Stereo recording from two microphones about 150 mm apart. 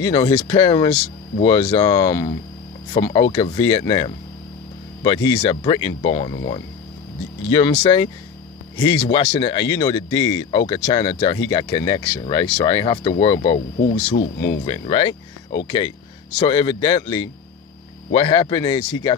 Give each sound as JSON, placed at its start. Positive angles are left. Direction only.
{"t": 0.0, "sound": "speech", "side_deg": 30}
{"t": 13.7, "sound": "speech", "side_deg": 90}
{"t": 14.6, "sound": "speech", "side_deg": 35}
{"t": 18.1, "sound": "speech", "side_deg": 40}